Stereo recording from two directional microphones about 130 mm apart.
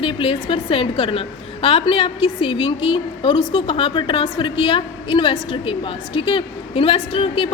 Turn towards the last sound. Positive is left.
turn(degrees=45)  # may be behind; listen again after turning